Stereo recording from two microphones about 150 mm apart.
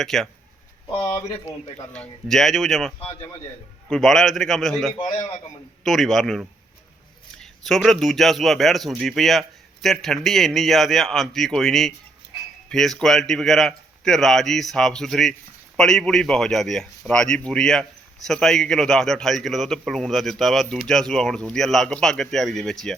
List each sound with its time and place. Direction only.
0.0 s speech: centre (ahead or behind)
1.9 s speech: 5° left (ahead or behind)